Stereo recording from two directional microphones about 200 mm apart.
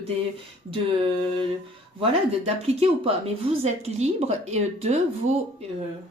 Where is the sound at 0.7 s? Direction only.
30° right (ahead or behind).